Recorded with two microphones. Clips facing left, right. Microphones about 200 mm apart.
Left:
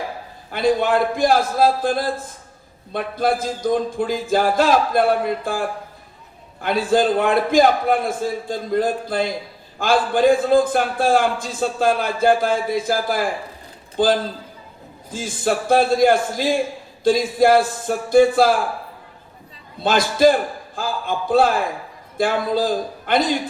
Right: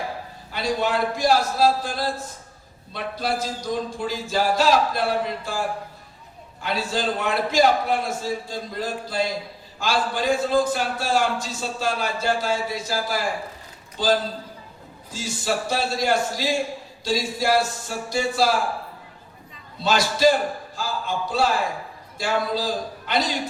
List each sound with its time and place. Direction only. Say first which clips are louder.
0.5 s a man's voice: left 6 dB; 55° left (ahead or behind)
19.8 s a man's voice: left 4 dB; 55° left (ahead or behind)